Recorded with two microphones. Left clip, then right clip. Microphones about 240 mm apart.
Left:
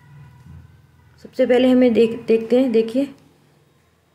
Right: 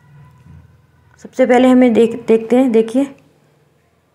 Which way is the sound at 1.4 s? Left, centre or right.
Centre.